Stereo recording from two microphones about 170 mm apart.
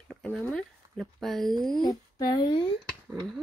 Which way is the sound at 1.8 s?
25° left (ahead or behind).